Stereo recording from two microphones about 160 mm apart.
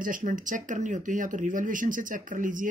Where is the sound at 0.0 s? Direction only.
55° right (ahead or behind).